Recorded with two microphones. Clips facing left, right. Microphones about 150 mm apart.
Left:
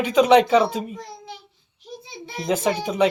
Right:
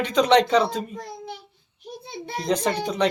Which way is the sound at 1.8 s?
55° right (ahead or behind).